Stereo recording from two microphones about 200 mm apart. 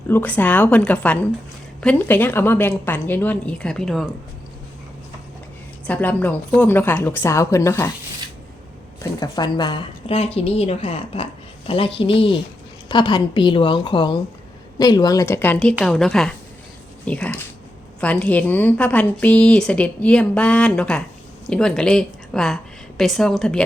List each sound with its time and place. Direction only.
0.1 s a woman's voice: 10° left (ahead or behind)
5.9 s a woman's voice: 10° left (ahead or behind)
9.2 s a woman's voice: 20° left (ahead or behind); by 23.6 s 5° left (ahead or behind)